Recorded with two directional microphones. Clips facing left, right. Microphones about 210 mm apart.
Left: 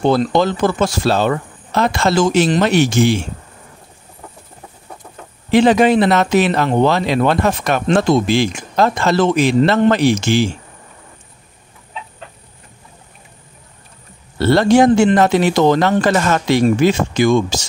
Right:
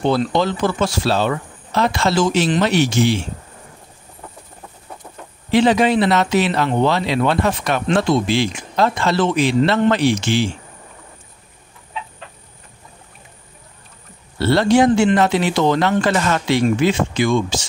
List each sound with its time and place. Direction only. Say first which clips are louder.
0.0 s speech: left 3 dB; 45° left (ahead or behind)
5.5 s speech: left 3 dB; 50° left (ahead or behind)
14.4 s speech: left 3 dB; 45° left (ahead or behind)